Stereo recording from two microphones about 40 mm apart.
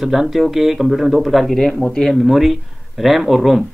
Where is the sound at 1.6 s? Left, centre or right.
Centre.